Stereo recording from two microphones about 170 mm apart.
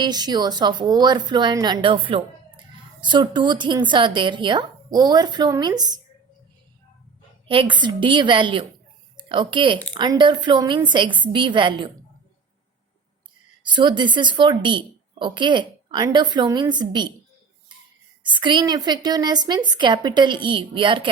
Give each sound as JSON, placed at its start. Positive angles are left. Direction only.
{"t": 0.0, "sound": "a woman's voice", "side_deg": -25}
{"t": 7.4, "sound": "a woman's voice", "side_deg": -30}
{"t": 13.7, "sound": "a woman's voice", "side_deg": -25}
{"t": 18.2, "sound": "a woman's voice", "side_deg": -30}